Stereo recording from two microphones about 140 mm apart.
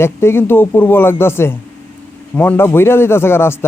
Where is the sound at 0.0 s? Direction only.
15° left (ahead or behind).